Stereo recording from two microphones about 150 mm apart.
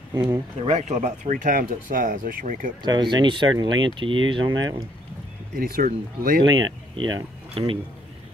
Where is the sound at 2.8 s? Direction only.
30° right (ahead or behind).